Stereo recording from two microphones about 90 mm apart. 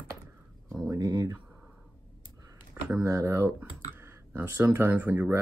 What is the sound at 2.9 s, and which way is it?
Speech, 40° right (ahead or behind).